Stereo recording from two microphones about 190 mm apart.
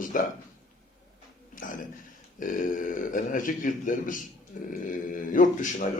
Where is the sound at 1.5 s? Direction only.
45° left (ahead or behind).